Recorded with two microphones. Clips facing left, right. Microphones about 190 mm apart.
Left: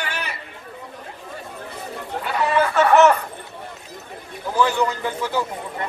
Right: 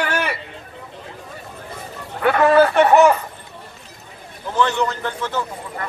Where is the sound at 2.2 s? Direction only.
60° right (ahead or behind).